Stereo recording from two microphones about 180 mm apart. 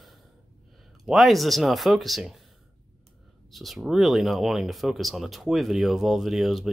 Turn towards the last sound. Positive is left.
turn(degrees=0)  # may be behind; listen again after turning